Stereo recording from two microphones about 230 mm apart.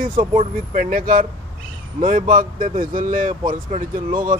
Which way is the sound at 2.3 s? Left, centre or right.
Right.